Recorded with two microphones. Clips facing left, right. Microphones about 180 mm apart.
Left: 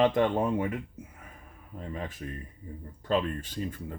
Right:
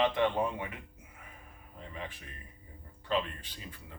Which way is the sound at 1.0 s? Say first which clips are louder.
Left 12 dB; 45° left (ahead or behind).